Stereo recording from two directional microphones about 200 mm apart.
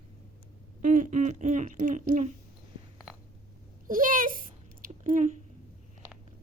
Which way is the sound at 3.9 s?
45° right (ahead or behind).